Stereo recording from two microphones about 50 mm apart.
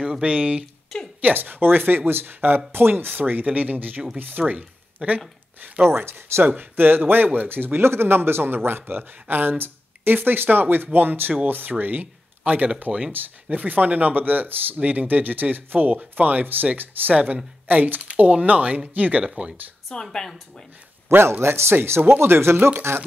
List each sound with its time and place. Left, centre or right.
0.2 s speech: right
0.9 s a sound: centre
1.2 s speech: right
5.9 s speech: right
6.4 s speech: right
17.1 s speech: right
17.6 s speech: right
18.0 s speech: right
19.2 s speech: right
19.9 s a woman's voice: centre
21.2 s speech: right